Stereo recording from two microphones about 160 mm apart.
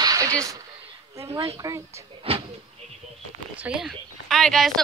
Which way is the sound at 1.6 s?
20° right (ahead or behind).